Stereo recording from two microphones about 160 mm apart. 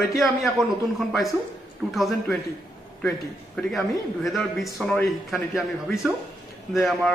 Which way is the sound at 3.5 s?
Centre (ahead or behind).